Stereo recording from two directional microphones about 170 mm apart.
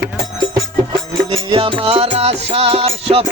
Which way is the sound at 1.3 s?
30° right (ahead or behind).